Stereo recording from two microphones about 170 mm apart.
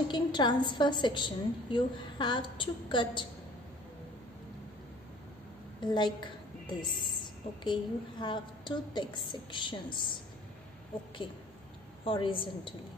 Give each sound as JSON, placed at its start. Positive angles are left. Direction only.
{"t": 0.1, "sound": "a woman's voice", "side_deg": 25}
{"t": 5.8, "sound": "a woman's voice", "side_deg": 25}
{"t": 12.0, "sound": "a woman's voice", "side_deg": 30}